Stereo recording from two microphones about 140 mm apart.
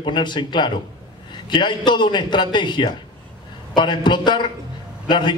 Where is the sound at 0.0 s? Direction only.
35° left (ahead or behind).